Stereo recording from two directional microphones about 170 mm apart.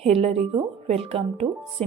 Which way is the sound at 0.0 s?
35° right (ahead or behind).